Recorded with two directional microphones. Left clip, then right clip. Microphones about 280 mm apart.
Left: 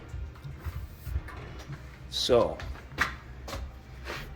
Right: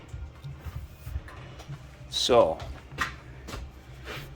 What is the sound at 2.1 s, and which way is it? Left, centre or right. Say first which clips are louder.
Speech: right 3 dB; centre.